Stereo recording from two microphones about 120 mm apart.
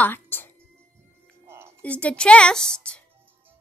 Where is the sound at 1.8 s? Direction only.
10° left (ahead or behind).